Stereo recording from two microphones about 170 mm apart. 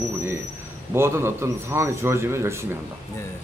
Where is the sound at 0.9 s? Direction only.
15° right (ahead or behind).